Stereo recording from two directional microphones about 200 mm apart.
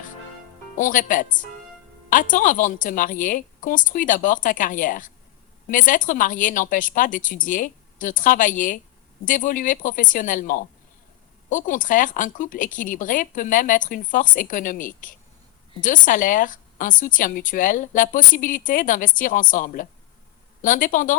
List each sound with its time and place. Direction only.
0.8 s a woman's voice: 40° left (ahead or behind)